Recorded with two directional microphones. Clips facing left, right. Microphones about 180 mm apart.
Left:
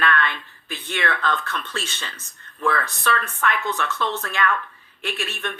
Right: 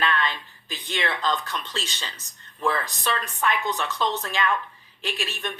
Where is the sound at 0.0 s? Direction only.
15° right (ahead or behind).